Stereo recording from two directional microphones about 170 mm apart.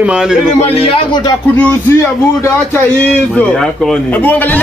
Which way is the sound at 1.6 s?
15° left (ahead or behind).